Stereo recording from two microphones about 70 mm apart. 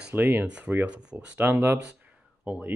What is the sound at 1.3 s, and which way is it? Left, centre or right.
Speech, right.